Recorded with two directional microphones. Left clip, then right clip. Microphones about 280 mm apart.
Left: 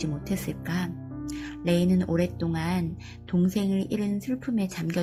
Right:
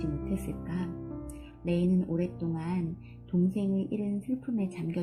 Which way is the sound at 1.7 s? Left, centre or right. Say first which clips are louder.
Left 5 dB; centre.